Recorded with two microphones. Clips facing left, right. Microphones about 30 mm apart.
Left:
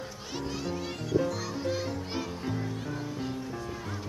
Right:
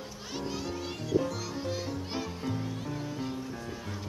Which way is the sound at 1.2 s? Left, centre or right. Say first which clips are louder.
Left 3 dB; centre.